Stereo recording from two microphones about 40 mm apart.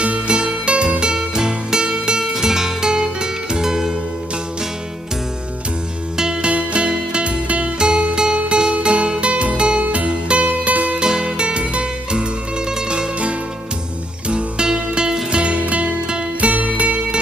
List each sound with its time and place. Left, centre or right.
0.0 s music: right; by 3.9 s centre
6.1 s music: centre
6.5 s music: right
10.1 s music: right
10.4 s music: right
11.0 s music: centre
14.3 s music: right